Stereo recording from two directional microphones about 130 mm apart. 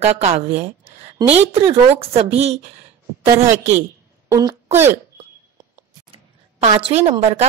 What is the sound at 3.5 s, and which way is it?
Speech, 60° right (ahead or behind).